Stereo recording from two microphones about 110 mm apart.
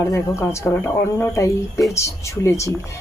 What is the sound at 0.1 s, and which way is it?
Speech, 25° left (ahead or behind).